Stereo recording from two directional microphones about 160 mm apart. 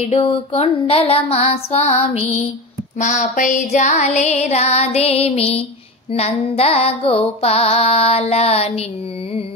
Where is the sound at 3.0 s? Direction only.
55° left (ahead or behind); by 5.7 s 40° left (ahead or behind).